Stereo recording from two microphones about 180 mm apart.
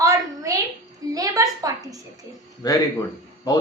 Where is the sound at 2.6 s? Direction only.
20° left (ahead or behind).